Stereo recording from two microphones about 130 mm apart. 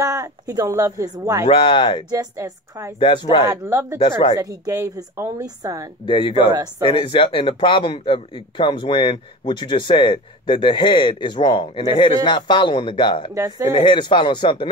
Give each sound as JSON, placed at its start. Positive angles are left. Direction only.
{"t": 0.0, "sound": "a woman's voice", "side_deg": -25}
{"t": 1.4, "sound": "speech", "side_deg": 40}
{"t": 2.0, "sound": "a woman's voice", "side_deg": -30}
{"t": 3.0, "sound": "speech", "side_deg": 40}
{"t": 3.4, "sound": "a woman's voice", "side_deg": -20}
{"t": 4.0, "sound": "a woman's voice", "side_deg": 45}
{"t": 4.4, "sound": "a woman's voice", "side_deg": -25}
{"t": 6.0, "sound": "speech", "side_deg": 40}
{"t": 13.3, "sound": "a woman's voice", "side_deg": -25}
{"t": 13.7, "sound": "speech", "side_deg": 35}